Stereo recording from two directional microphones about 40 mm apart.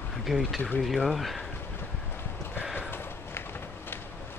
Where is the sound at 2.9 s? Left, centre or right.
Left.